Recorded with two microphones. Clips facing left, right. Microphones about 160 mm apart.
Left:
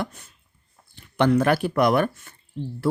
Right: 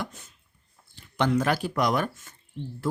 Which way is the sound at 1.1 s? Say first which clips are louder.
Left 5 dB; 60° left (ahead or behind).